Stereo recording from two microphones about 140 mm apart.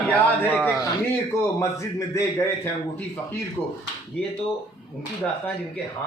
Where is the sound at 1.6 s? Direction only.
20° left (ahead or behind).